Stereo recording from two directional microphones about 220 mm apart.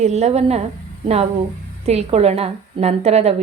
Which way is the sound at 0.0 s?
30° right (ahead or behind).